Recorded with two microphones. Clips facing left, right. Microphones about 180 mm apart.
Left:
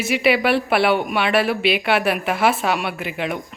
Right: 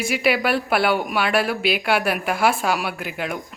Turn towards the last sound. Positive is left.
turn(degrees=0)  # may be behind; listen again after turning